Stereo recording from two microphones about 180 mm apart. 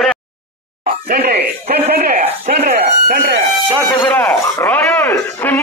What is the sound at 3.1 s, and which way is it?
Speech, 60° right (ahead or behind).